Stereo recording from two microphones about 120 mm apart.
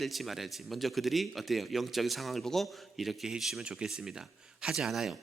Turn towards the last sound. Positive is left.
turn(degrees=0)  # may be behind; listen again after turning